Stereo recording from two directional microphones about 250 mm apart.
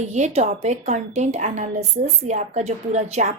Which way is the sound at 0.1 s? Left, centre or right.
Right.